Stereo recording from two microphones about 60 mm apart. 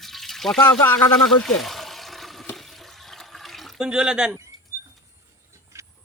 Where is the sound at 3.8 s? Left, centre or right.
Centre.